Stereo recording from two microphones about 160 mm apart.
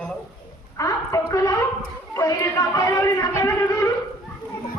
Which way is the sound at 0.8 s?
20° left (ahead or behind).